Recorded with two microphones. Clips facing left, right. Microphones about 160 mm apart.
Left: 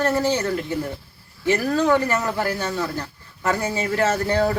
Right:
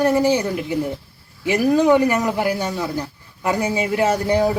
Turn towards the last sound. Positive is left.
turn(degrees=-15)  # may be behind; listen again after turning